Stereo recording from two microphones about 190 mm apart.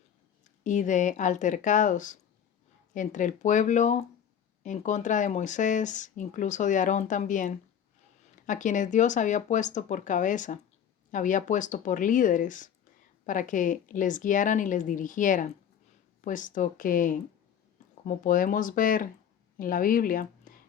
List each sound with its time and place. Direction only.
0.6 s a woman's voice: 40° left (ahead or behind)